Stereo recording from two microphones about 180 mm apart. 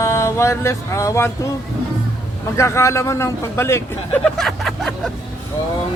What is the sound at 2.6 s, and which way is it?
Speech, 15° left (ahead or behind).